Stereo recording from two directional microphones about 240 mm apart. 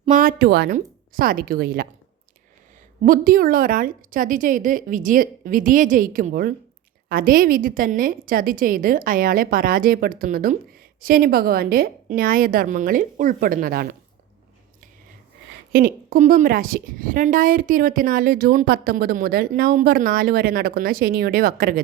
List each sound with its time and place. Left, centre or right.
0.0 s a woman's voice: right
3.0 s a woman's voice: right
15.7 s a woman's voice: right